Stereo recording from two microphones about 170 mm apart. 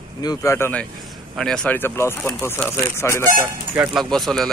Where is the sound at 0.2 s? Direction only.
20° left (ahead or behind).